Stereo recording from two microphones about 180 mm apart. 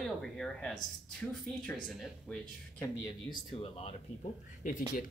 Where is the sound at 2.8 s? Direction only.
25° left (ahead or behind).